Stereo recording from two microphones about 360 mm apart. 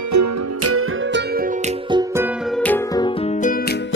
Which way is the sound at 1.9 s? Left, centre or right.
Centre.